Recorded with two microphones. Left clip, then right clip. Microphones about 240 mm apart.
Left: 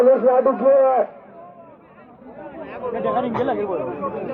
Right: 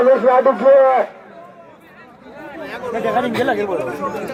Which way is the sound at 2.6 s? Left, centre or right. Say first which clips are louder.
Right 3 dB; right.